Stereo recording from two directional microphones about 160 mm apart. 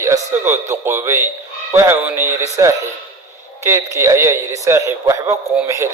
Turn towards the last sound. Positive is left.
turn(degrees=-20)  # may be behind; listen again after turning